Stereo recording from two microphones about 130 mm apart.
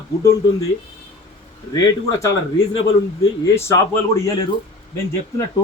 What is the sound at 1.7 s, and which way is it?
Speech, 25° left (ahead or behind).